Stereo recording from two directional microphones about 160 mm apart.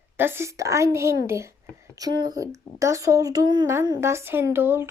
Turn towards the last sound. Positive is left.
turn(degrees=-15)  # may be behind; listen again after turning